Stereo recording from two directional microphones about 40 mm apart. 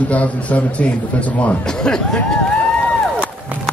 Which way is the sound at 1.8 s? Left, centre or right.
Centre.